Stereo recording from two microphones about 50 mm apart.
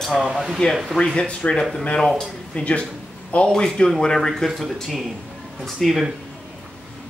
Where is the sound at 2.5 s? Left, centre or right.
Left.